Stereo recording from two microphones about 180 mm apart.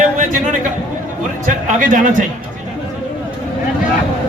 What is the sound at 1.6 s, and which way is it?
Speech, 45° right (ahead or behind).